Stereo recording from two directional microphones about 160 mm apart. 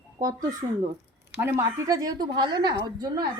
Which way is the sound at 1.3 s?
15° right (ahead or behind).